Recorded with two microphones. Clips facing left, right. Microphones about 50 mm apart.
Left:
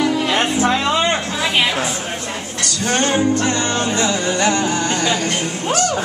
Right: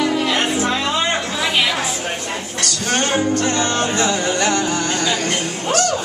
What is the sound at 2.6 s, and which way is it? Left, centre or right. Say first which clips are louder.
Music: left 2 dB; left.